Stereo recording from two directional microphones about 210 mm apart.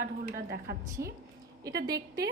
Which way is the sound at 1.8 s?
15° right (ahead or behind).